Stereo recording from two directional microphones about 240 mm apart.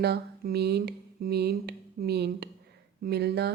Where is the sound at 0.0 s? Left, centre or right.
Right.